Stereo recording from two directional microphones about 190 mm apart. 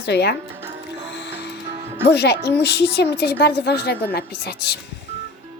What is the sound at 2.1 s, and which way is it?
Speech, 60° left (ahead or behind).